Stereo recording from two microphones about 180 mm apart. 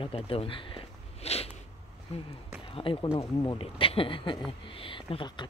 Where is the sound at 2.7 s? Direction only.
30° left (ahead or behind).